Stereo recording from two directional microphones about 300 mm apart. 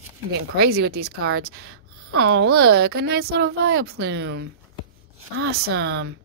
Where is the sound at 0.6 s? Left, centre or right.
Right.